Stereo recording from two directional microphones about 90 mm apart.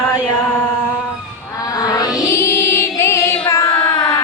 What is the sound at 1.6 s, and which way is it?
Music, 45° left (ahead or behind).